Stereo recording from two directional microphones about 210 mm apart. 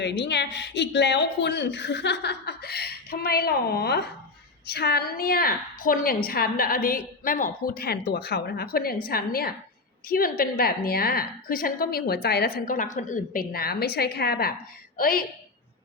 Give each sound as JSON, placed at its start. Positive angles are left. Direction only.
{"t": 0.0, "sound": "a woman's voice", "side_deg": 55}